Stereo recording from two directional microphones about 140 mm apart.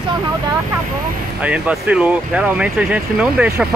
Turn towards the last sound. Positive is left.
turn(degrees=-5)  # may be behind; listen again after turning